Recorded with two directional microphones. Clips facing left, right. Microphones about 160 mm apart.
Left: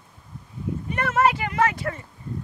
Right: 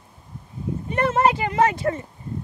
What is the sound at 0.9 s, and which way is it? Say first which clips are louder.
A child's voice: right 2 dB; 30° right (ahead or behind).